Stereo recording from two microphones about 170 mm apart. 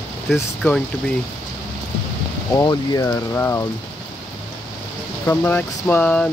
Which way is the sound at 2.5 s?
20° left (ahead or behind).